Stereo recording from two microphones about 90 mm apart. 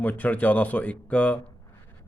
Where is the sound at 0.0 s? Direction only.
15° left (ahead or behind).